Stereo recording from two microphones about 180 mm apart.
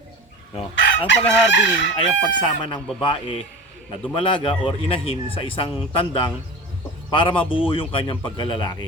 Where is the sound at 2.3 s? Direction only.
25° left (ahead or behind).